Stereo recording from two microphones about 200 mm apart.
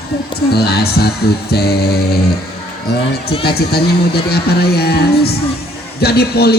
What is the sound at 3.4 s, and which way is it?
Speech, 50° left (ahead or behind).